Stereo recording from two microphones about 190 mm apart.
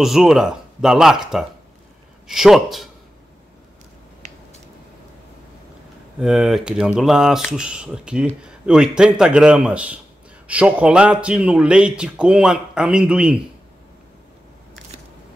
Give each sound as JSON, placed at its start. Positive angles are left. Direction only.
{"t": 0.0, "sound": "speech", "side_deg": 0}
{"t": 6.1, "sound": "speech", "side_deg": -5}